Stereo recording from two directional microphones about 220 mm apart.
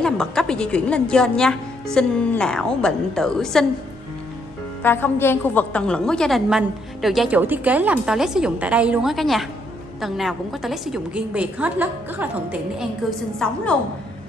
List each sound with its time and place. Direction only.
0.0 s a woman's voice: 5° left (ahead or behind)
4.8 s a woman's voice: 10° left (ahead or behind)